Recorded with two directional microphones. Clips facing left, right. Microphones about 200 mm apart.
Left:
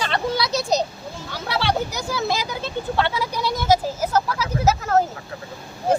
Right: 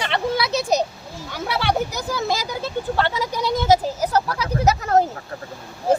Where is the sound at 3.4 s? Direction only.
15° right (ahead or behind).